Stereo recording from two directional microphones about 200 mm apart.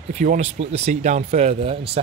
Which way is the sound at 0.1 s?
35° right (ahead or behind).